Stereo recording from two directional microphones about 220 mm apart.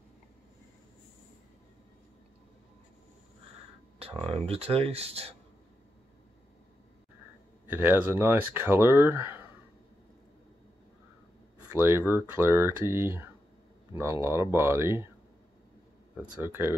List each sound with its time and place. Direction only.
4.0 s a sound: 25° right (ahead or behind)
4.5 s speech: 25° right (ahead or behind)
7.6 s speech: 10° right (ahead or behind)
11.7 s speech: 10° right (ahead or behind)
16.2 s speech: 10° right (ahead or behind)